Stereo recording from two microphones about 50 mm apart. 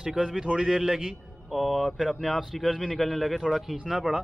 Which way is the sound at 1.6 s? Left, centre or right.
Centre.